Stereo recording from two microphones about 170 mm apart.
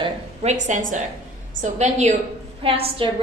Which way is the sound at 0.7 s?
45° right (ahead or behind).